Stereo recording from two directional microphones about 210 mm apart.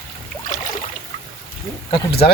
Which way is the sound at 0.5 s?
35° left (ahead or behind).